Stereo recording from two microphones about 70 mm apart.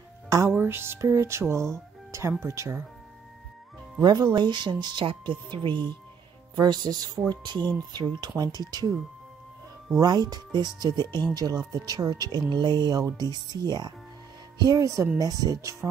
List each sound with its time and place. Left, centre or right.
0.5 s speech: right
4.0 s speech: right
6.5 s speech: right
10.0 s speech: right
11.3 s speech: right
14.6 s speech: right